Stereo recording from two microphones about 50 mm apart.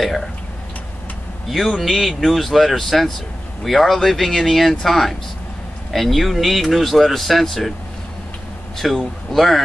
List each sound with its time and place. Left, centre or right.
1.5 s speech: centre
8.7 s speech: centre